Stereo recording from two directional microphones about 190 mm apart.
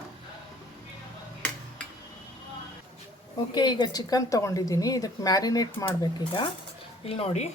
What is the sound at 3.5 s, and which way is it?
Speech, 25° left (ahead or behind).